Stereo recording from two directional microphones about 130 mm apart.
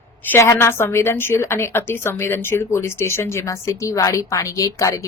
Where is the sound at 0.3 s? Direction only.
20° left (ahead or behind).